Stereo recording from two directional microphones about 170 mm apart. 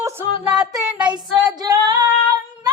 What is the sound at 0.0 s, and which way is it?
Music, 15° right (ahead or behind).